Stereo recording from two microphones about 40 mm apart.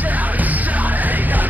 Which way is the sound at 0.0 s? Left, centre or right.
Right.